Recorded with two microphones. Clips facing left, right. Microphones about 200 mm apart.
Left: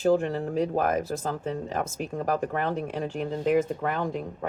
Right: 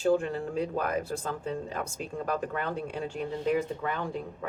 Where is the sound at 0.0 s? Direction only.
40° left (ahead or behind).